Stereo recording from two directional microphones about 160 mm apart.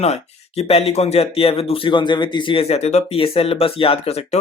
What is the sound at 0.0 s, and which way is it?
Speech, 40° left (ahead or behind).